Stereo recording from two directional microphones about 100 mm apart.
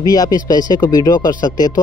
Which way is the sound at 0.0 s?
40° left (ahead or behind).